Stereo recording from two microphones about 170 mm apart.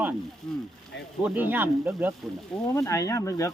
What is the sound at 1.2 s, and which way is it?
Speech, 10° right (ahead or behind).